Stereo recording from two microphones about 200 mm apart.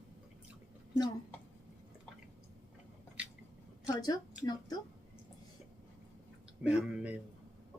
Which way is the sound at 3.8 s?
20° left (ahead or behind).